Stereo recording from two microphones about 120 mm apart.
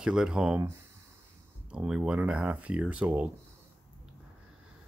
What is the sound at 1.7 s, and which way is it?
Speech, 5° right (ahead or behind).